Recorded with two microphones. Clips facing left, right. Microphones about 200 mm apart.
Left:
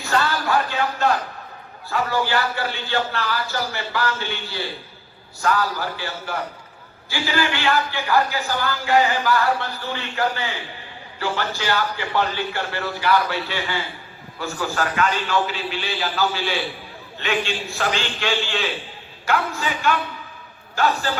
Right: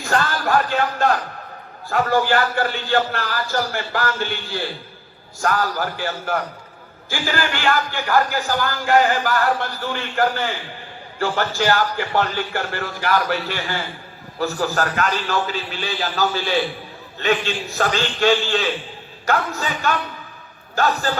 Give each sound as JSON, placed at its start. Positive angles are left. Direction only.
{"t": 0.0, "sound": "music", "side_deg": -45}
{"t": 1.9, "sound": "a man's voice", "side_deg": -45}